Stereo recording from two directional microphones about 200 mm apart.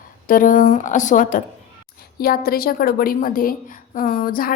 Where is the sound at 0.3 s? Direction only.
40° left (ahead or behind).